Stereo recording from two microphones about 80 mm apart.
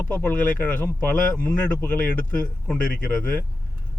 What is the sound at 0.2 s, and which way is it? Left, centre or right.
Speech, left.